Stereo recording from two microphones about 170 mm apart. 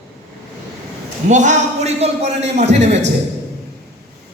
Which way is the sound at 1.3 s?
45° right (ahead or behind).